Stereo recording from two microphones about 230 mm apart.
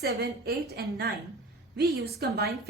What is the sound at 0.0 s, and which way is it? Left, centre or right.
A woman's voice, right.